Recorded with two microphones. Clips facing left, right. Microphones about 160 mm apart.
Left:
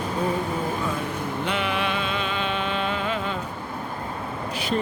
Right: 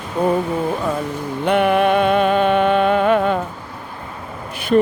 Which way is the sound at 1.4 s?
55° right (ahead or behind).